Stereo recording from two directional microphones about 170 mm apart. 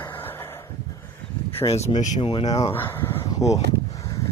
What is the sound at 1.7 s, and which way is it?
Speech, 40° left (ahead or behind).